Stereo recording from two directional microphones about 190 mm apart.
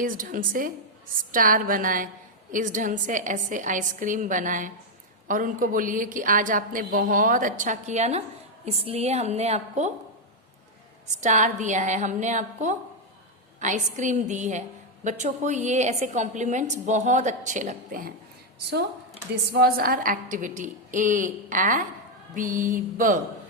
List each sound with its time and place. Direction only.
0.0 s a woman's voice: 45° right (ahead or behind)
11.2 s a woman's voice: 40° right (ahead or behind)
19.3 s a woman's voice: 55° right (ahead or behind)